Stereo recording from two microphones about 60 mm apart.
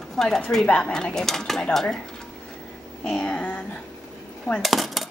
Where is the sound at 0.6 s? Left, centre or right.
Centre.